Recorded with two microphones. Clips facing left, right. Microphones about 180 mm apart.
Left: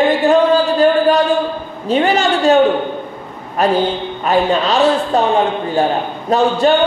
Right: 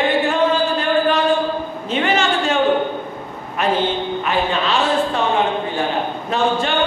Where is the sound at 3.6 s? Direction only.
40° left (ahead or behind).